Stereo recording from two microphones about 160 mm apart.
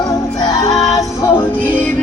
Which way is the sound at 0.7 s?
Centre (ahead or behind).